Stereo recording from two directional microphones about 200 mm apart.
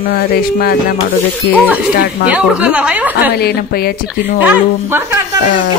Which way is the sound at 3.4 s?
50° left (ahead or behind).